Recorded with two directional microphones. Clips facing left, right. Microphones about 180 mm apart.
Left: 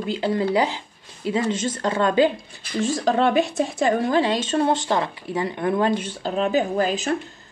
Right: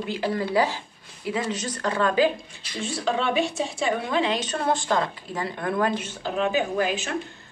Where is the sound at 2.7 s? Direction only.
40° left (ahead or behind).